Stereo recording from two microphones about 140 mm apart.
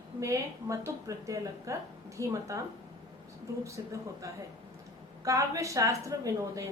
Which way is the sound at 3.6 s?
20° right (ahead or behind).